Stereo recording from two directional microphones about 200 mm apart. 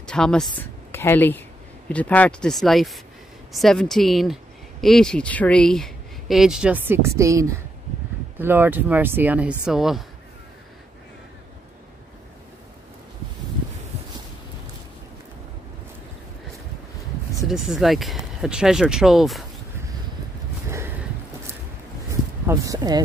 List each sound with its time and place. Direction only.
0.0 s speech: 5° left (ahead or behind)
17.5 s speech: centre (ahead or behind)
22.5 s a sound: 20° right (ahead or behind)